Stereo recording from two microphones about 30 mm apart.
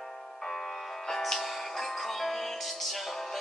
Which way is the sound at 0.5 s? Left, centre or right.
Centre.